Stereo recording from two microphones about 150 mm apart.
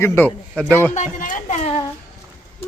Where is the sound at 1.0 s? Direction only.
55° left (ahead or behind).